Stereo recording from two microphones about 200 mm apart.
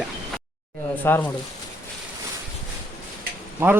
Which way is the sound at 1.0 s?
10° left (ahead or behind).